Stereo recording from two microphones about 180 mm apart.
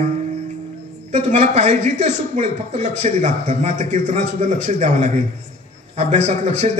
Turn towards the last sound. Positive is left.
turn(degrees=-40)  # may be behind; listen again after turning